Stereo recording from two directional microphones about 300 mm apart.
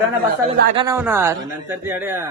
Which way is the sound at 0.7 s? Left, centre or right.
Centre.